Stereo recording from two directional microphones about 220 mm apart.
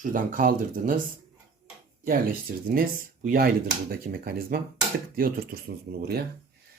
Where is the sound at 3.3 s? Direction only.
40° right (ahead or behind).